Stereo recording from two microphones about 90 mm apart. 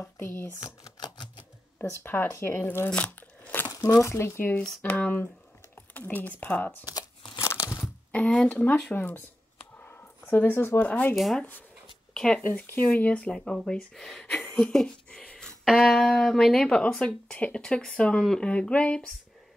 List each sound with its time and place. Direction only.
0.0 s speech: 25° left (ahead or behind)
0.8 s typewriter: 50° left (ahead or behind)
1.8 s speech: 25° left (ahead or behind)
2.9 s biting: 15° left (ahead or behind)
3.6 s speech: 40° left (ahead or behind); by 6.8 s 20° left (ahead or behind)
6.9 s crumpling: 45° left (ahead or behind)
7.4 s a sound: 35° left (ahead or behind)
8.1 s speech: 15° left (ahead or behind)
9.8 s a sound: 15° left (ahead or behind)
11.1 s speech: centre (ahead or behind)
12.1 s a sound: 5° left (ahead or behind)
12.4 s speech: 15° left (ahead or behind)
14.4 s a sound: 10° left (ahead or behind)
15.6 s speech: centre (ahead or behind)